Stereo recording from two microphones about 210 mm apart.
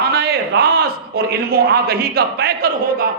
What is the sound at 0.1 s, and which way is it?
A man's voice, 50° right (ahead or behind).